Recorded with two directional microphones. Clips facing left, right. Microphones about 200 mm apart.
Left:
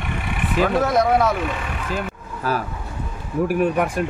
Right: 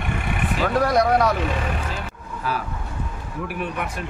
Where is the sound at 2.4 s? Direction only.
45° left (ahead or behind).